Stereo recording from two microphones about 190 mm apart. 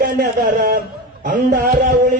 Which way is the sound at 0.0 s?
45° right (ahead or behind).